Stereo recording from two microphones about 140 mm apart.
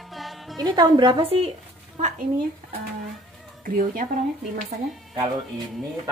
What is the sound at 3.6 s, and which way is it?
Speech, 80° right.